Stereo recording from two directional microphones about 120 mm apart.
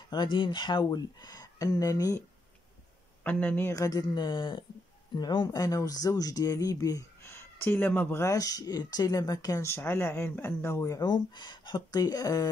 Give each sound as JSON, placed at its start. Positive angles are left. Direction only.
{"t": 0.1, "sound": "speech", "side_deg": 35}
{"t": 3.3, "sound": "speech", "side_deg": 15}
{"t": 3.7, "sound": "speech", "side_deg": 30}